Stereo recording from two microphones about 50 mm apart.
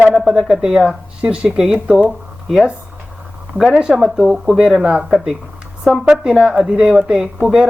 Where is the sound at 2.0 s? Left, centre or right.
Centre.